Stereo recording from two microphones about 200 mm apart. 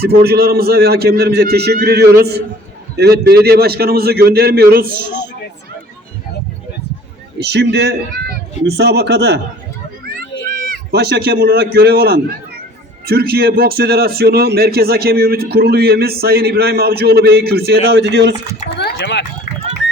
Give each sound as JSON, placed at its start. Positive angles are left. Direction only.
{"t": 0.0, "sound": "a man's voice", "side_deg": -50}
{"t": 7.3, "sound": "a man's voice", "side_deg": -55}
{"t": 10.7, "sound": "a man's voice", "side_deg": -50}
{"t": 18.8, "sound": "a sound", "side_deg": 55}